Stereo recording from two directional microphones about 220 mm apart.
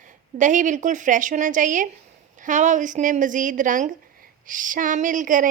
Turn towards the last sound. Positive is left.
turn(degrees=-35)  # may be behind; listen again after turning